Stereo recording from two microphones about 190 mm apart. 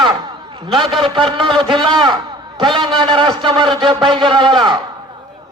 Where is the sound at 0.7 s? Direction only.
30° right (ahead or behind).